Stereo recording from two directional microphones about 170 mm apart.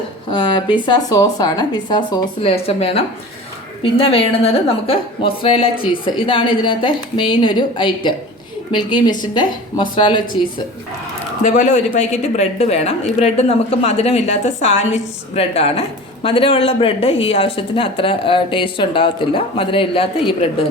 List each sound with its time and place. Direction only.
0.3 s speech: 30° left (ahead or behind)
11.4 s speech: 45° left (ahead or behind)